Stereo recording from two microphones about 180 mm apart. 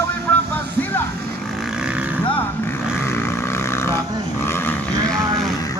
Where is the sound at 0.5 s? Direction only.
10° left (ahead or behind).